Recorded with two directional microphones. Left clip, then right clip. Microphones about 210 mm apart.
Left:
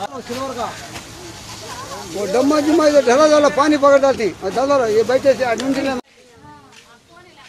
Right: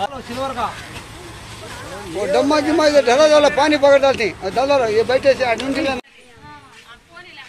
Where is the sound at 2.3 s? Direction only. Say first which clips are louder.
Even; 50° left (ahead or behind).